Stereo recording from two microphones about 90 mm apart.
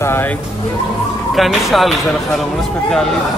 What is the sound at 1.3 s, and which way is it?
A man's voice, centre (ahead or behind).